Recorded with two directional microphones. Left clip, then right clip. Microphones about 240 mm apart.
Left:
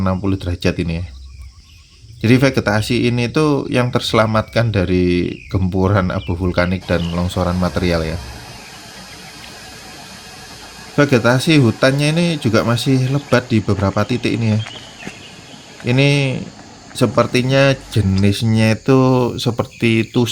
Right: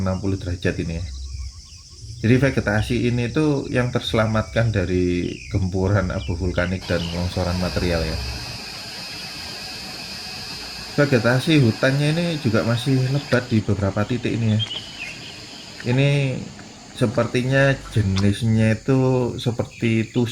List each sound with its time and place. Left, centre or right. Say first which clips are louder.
0.0 s speech: left 6 dB; left
2.2 s speech: left 5 dB; left
10.9 s speech: left 5 dB; left
15.9 s speech: left 6 dB; left